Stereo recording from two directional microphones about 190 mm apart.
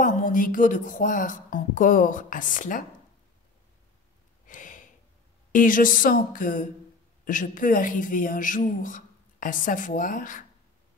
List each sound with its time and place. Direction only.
0.0 s speech: 45° left (ahead or behind)
4.5 s a sound: 45° left (ahead or behind)
5.5 s speech: 45° left (ahead or behind)